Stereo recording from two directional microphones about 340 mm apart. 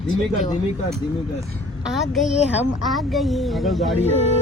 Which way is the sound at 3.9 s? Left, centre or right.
Centre.